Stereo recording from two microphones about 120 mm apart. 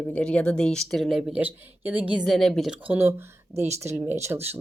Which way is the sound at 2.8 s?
15° right (ahead or behind).